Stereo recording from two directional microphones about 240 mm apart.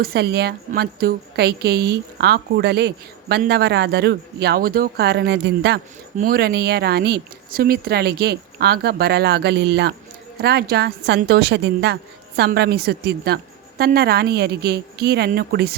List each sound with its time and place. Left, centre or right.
0.0 s a woman's voice: right